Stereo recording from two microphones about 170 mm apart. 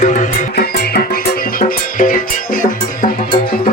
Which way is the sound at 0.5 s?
70° left (ahead or behind).